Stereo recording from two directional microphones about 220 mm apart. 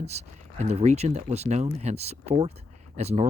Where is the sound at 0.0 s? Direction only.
30° right (ahead or behind).